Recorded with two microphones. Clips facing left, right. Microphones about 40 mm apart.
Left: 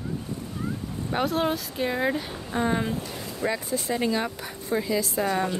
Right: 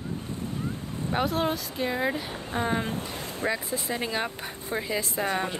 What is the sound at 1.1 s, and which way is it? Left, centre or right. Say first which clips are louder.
Speech: left 2 dB; centre.